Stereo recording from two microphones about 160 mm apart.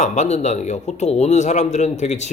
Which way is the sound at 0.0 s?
45° left (ahead or behind).